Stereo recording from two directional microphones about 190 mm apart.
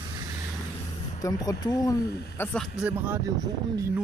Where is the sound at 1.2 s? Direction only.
20° left (ahead or behind).